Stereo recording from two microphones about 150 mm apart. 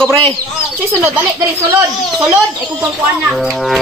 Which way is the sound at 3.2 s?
Centre (ahead or behind).